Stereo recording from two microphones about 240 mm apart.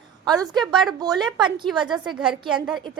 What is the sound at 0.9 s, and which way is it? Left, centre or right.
Speech, centre.